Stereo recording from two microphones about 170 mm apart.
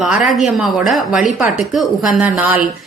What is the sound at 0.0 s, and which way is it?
A woman's voice, centre (ahead or behind).